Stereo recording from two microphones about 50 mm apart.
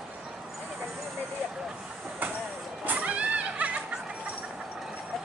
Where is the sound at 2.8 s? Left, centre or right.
Right.